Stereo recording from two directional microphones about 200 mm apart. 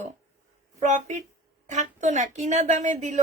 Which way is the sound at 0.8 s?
35° right (ahead or behind).